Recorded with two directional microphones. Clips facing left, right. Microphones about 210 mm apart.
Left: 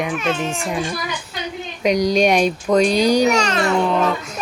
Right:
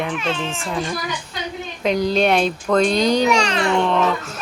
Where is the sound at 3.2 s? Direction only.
40° left (ahead or behind).